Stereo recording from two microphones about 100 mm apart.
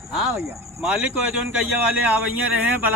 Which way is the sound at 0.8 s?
10° right (ahead or behind).